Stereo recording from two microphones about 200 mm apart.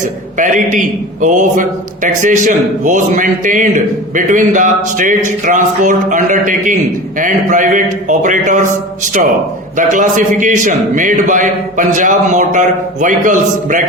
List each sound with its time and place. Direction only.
0.0 s a man's voice: 40° right (ahead or behind)
9.7 s a man's voice: 40° right (ahead or behind)